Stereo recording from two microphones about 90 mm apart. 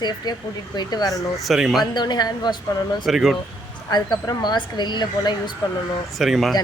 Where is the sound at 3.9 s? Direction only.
50° left (ahead or behind).